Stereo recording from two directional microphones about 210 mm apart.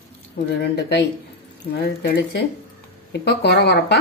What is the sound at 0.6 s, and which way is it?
Speech, 50° left (ahead or behind).